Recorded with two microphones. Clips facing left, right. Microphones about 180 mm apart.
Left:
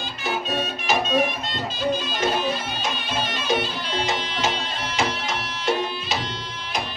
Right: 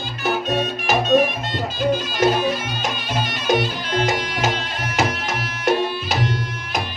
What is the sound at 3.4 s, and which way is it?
Music, 45° right (ahead or behind).